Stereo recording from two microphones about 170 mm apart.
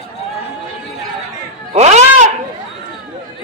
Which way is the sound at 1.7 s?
40° right (ahead or behind).